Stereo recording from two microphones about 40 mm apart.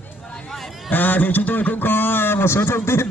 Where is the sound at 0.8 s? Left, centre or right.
Left.